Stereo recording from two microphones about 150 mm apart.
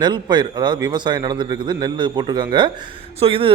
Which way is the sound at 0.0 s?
30° right (ahead or behind).